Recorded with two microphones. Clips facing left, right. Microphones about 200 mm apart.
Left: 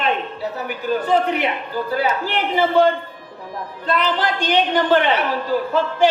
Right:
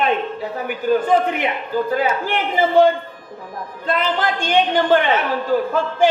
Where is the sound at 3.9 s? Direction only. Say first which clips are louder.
Even; 50° right (ahead or behind).